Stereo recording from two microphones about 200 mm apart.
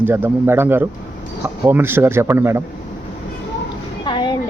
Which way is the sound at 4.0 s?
25° left (ahead or behind).